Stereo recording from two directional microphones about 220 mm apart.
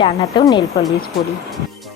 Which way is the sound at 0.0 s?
20° left (ahead or behind).